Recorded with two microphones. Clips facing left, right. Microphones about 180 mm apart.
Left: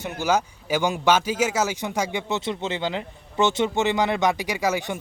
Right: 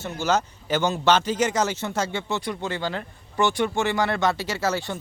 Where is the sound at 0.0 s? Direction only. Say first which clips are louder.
Left 1 dB; 10° left (ahead or behind).